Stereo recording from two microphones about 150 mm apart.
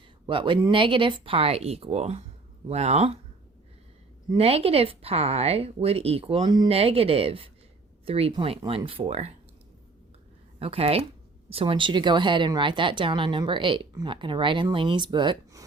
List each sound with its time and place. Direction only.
0.3 s speech: 35° right (ahead or behind)
4.3 s speech: 40° right (ahead or behind)
6.7 s speech: 40° right (ahead or behind)
10.6 s speech: 40° right (ahead or behind)